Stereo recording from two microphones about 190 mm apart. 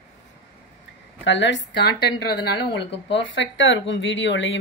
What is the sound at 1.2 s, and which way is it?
A woman's voice, 75° left (ahead or behind).